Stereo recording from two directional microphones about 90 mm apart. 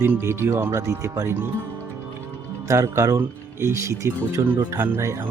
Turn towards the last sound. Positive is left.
turn(degrees=-30)  # may be behind; listen again after turning